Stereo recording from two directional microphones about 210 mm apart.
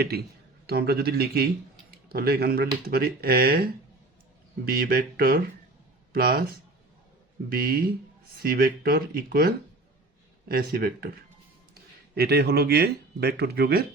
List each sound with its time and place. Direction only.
0.0 s speech: 50° right (ahead or behind)